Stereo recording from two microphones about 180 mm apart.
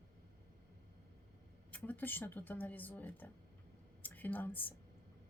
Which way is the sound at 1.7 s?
10° left (ahead or behind).